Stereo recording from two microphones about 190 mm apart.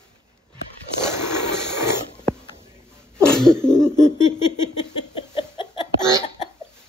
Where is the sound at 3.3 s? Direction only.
5° left (ahead or behind).